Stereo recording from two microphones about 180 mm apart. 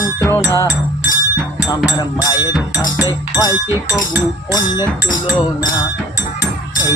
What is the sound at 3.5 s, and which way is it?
Chink, 15° right (ahead or behind).